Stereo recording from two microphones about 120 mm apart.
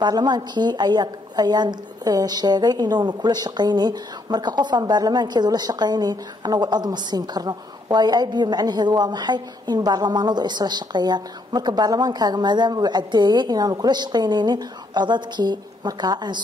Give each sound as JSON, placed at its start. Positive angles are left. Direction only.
{"t": 0.0, "sound": "a woman's voice", "side_deg": -35}